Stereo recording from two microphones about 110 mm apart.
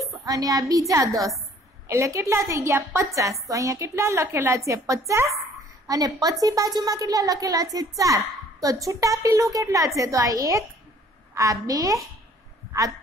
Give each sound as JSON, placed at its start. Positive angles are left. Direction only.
{"t": 0.2, "sound": "a woman's voice", "side_deg": -30}